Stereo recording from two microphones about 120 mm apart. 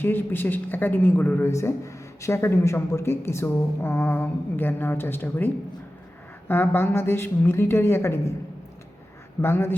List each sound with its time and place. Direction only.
0.0 s a woman's voice: 15° left (ahead or behind)
6.5 s a woman's voice: 20° left (ahead or behind)
9.4 s a woman's voice: 20° left (ahead or behind)